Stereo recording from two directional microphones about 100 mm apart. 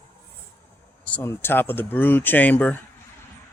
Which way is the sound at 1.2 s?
20° left (ahead or behind).